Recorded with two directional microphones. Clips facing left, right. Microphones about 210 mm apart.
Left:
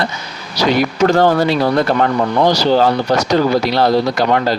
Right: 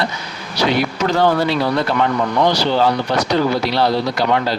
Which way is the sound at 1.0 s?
45° left (ahead or behind).